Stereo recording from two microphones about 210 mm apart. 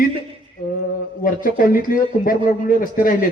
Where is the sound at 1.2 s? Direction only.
40° left (ahead or behind).